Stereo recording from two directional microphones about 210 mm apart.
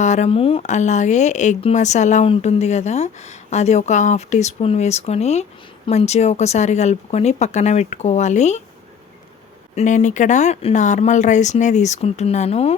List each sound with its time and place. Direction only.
0.0 s speech: 35° left (ahead or behind)
9.7 s speech: 35° left (ahead or behind)